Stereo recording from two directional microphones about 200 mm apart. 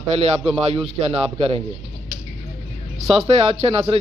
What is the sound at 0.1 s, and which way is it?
A man's voice, 30° right (ahead or behind).